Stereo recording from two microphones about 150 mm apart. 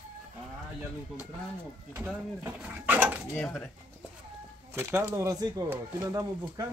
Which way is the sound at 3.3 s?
5° left (ahead or behind).